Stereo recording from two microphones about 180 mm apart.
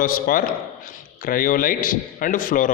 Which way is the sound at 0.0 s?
50° left (ahead or behind).